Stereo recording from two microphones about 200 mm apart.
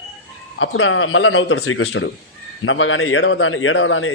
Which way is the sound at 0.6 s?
85° left.